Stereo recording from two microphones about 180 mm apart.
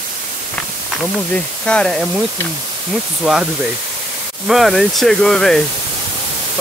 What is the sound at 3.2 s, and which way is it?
Speech, centre (ahead or behind).